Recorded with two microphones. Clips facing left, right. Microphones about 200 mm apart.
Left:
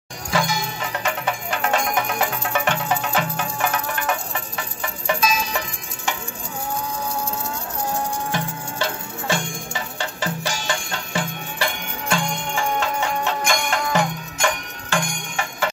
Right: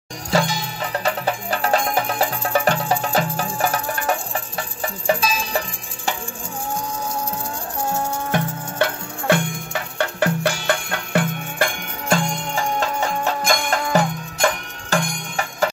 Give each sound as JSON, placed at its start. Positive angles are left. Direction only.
{"t": 0.3, "sound": "music", "side_deg": -35}
{"t": 8.3, "sound": "music", "side_deg": -60}